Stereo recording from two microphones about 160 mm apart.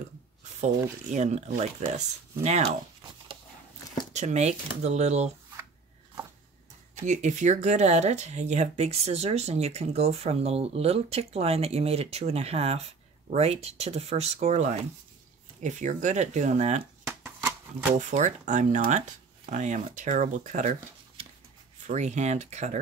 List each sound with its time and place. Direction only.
1.1 s speech: 45° right (ahead or behind)
4.1 s speech: 45° right (ahead or behind)
7.0 s speech: 50° right (ahead or behind)
17.0 s shuffling cards: 15° right (ahead or behind)
17.9 s speech: 50° right (ahead or behind)
21.2 s a sound: 35° right (ahead or behind)
21.8 s speech: 50° right (ahead or behind)